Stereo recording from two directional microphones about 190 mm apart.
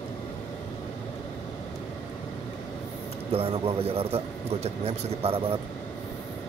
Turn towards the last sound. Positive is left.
turn(degrees=-30)  # may be behind; listen again after turning